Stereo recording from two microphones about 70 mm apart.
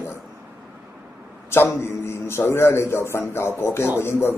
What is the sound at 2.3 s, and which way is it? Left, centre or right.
A man's voice, left.